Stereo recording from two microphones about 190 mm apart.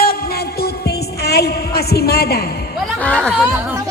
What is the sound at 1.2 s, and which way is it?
A woman's voice, 55° left (ahead or behind).